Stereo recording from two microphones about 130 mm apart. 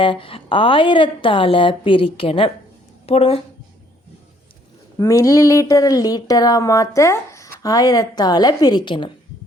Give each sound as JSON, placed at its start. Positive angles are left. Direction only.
{"t": 0.0, "sound": "a woman's voice", "side_deg": 45}
{"t": 4.9, "sound": "speech", "side_deg": 25}